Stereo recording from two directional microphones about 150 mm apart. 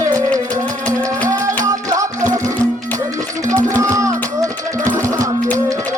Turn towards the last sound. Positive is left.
turn(degrees=-20)  # may be behind; listen again after turning